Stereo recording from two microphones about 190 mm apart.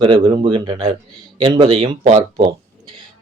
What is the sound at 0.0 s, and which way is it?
A man's voice, 25° right (ahead or behind).